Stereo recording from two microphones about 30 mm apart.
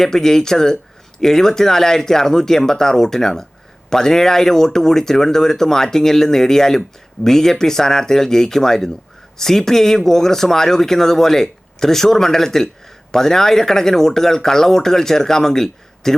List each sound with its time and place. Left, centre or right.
0.0 s speech: centre